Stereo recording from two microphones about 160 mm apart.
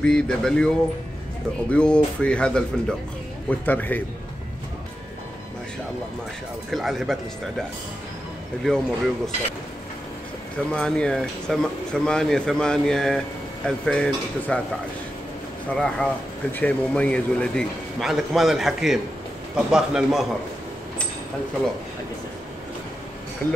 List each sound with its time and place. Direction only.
0.0 s speech: 5° left (ahead or behind)
1.7 s speech: 5° left (ahead or behind)
6.7 s speech: centre (ahead or behind)
8.6 s speech: 5° left (ahead or behind)
10.7 s speech: 5° left (ahead or behind)
15.7 s speech: 5° left (ahead or behind)
23.4 s speech: 15° left (ahead or behind)